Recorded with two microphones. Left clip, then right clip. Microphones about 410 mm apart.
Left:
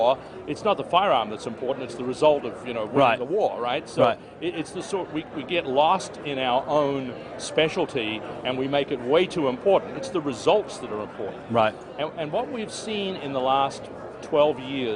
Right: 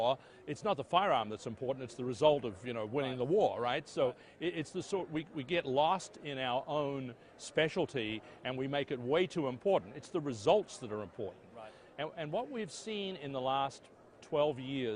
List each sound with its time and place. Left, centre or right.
0.0 s speech: right
11.9 s a man's voice: right